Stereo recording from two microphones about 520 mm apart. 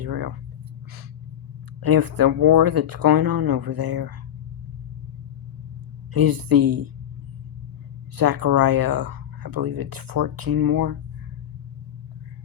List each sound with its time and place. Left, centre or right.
0.0 s speech: right
1.8 s speech: right
6.1 s speech: right
8.1 s speech: right